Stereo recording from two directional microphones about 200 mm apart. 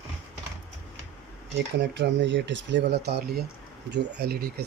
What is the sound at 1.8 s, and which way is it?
Speech, 60° right (ahead or behind).